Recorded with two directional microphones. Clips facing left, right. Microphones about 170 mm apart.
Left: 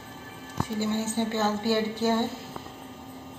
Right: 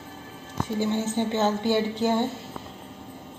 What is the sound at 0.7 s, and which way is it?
A woman's voice, 20° right (ahead or behind).